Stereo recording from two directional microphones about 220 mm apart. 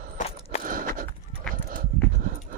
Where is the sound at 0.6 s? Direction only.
40° right (ahead or behind).